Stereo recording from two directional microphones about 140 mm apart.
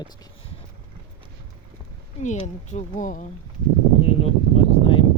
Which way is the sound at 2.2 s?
55° left (ahead or behind).